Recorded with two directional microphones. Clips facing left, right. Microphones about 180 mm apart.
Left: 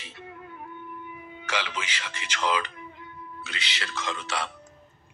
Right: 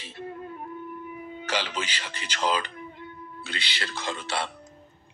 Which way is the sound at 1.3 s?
35° right (ahead or behind).